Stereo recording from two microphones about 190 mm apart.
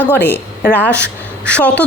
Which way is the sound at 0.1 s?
60° left (ahead or behind).